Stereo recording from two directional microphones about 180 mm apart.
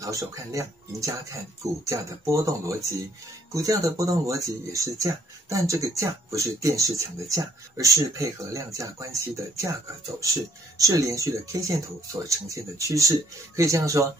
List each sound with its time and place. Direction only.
0.0 s speech: 20° right (ahead or behind)